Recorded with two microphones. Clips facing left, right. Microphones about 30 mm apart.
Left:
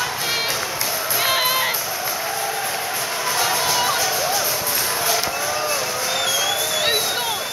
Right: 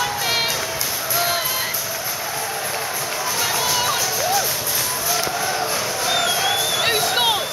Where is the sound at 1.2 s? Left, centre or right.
Left.